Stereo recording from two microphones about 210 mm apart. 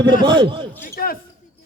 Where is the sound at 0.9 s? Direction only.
45° left (ahead or behind).